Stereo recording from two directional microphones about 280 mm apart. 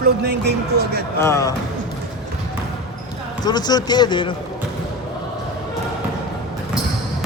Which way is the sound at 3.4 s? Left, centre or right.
Centre.